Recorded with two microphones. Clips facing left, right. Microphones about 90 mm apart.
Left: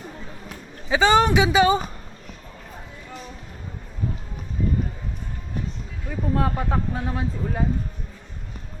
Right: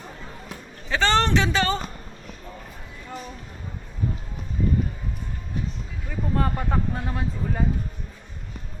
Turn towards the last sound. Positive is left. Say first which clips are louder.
# left 1 dB
turn(degrees=5)  # may be behind; listen again after turning